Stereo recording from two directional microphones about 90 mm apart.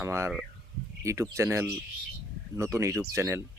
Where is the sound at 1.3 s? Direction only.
30° right (ahead or behind).